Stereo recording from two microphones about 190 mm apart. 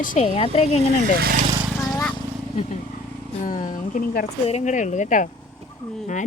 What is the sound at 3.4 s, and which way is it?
A woman's voice, 45° left (ahead or behind).